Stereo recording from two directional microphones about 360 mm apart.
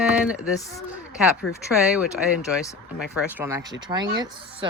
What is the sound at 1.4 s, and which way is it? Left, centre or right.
Speech, left.